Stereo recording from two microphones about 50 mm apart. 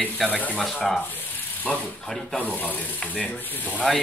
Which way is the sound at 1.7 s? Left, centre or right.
Left.